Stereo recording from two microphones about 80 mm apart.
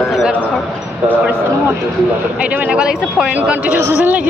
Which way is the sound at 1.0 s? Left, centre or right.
Centre.